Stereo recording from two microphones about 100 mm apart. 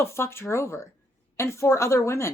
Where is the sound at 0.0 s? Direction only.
25° left (ahead or behind).